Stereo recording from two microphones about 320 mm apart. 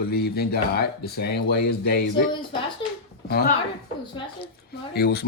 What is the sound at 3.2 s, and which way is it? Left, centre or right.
Speech, left.